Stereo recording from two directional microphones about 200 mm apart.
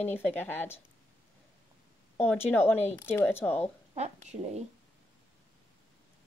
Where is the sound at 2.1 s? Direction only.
10° left (ahead or behind).